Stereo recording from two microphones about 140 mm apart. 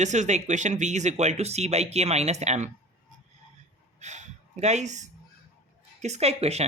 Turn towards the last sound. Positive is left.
turn(degrees=-50)  # may be behind; listen again after turning